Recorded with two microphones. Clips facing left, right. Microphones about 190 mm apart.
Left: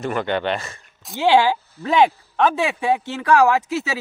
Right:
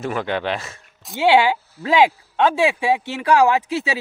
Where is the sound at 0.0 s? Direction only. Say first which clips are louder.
Left 1 dB; centre (ahead or behind).